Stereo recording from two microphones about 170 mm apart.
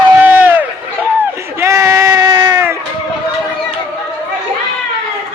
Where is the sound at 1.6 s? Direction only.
15° right (ahead or behind).